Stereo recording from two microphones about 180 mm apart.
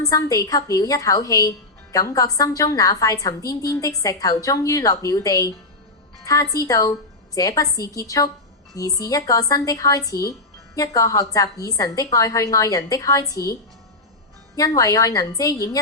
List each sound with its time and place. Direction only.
0.0 s a woman's voice: 20° left (ahead or behind)
14.8 s a woman's voice: 20° left (ahead or behind)